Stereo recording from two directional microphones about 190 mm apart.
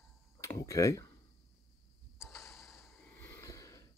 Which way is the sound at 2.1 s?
Centre (ahead or behind).